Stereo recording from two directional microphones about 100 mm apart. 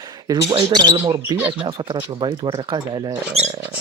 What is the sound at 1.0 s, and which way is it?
Speech, 35° right (ahead or behind).